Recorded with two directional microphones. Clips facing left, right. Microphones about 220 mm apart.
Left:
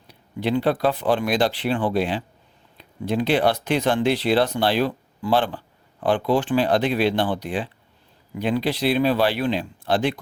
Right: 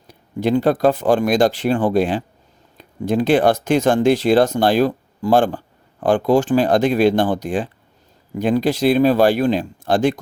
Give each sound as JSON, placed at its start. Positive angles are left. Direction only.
{"t": 0.1, "sound": "speech", "side_deg": -45}